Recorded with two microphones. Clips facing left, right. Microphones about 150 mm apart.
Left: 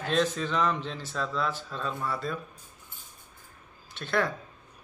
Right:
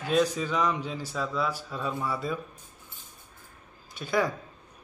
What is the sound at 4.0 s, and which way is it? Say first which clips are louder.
Speech: right 1 dB; 5° right (ahead or behind).